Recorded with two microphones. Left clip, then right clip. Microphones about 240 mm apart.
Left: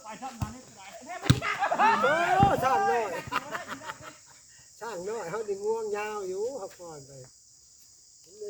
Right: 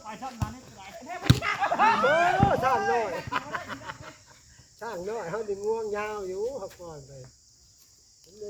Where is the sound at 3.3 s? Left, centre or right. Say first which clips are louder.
Right 1 dB; left.